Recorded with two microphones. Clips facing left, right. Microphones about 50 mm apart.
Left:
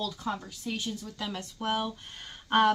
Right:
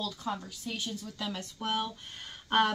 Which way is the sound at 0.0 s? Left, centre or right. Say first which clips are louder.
Left 2 dB; centre.